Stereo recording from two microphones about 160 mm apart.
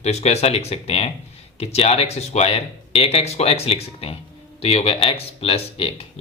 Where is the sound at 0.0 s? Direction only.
45° left (ahead or behind).